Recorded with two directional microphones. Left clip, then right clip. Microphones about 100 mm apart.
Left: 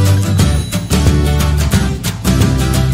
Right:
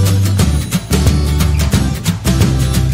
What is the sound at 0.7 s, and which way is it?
Music, centre (ahead or behind).